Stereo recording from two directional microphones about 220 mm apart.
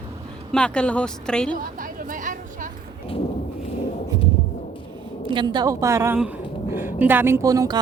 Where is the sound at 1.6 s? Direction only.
40° right (ahead or behind).